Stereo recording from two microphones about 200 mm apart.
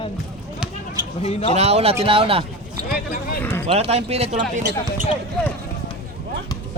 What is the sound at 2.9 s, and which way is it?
Speech, 45° left (ahead or behind).